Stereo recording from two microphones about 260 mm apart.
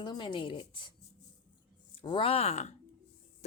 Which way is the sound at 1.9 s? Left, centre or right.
Centre.